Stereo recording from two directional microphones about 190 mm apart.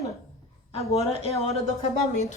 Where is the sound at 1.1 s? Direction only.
30° left (ahead or behind).